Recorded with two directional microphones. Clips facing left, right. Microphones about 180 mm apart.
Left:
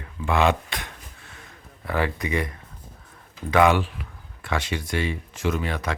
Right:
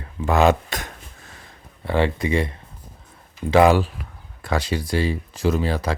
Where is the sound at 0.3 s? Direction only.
40° right (ahead or behind).